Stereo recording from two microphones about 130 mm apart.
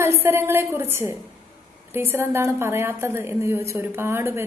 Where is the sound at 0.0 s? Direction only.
20° right (ahead or behind).